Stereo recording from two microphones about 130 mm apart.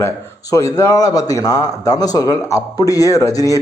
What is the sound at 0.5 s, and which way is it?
A man's voice, 20° left (ahead or behind).